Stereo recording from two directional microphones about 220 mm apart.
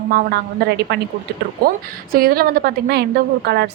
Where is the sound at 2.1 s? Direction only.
45° right (ahead or behind).